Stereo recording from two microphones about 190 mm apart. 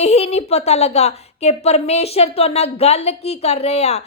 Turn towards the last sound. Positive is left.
turn(degrees=35)  # may be behind; listen again after turning